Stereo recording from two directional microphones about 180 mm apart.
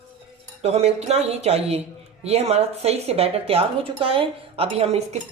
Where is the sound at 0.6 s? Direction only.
35° right (ahead or behind).